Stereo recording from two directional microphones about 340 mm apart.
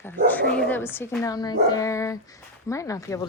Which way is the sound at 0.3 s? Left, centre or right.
Centre.